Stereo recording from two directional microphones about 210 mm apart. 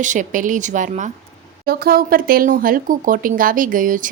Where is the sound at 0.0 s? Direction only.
35° right (ahead or behind).